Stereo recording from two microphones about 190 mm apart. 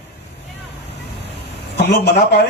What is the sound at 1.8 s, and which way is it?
Speech, 60° left (ahead or behind).